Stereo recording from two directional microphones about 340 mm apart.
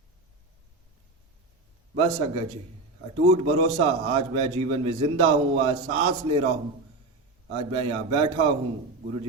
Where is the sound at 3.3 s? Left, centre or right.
Centre.